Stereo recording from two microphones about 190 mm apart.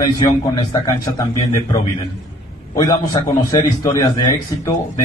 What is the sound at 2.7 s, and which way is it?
A man's voice, 20° left (ahead or behind).